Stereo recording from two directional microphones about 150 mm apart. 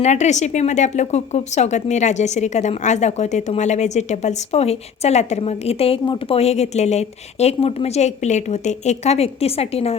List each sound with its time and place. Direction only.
0.0 s a woman's voice: 50° left (ahead or behind)